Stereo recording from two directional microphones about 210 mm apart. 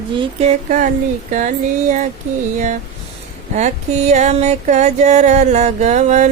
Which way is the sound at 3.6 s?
35° right (ahead or behind).